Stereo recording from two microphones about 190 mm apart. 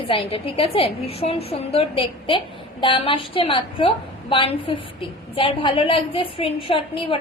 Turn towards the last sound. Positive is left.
turn(degrees=25)  # may be behind; listen again after turning